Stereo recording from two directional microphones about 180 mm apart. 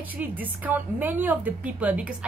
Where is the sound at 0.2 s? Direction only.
10° right (ahead or behind).